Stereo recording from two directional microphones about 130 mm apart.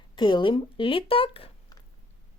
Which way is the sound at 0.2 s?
35° left (ahead or behind).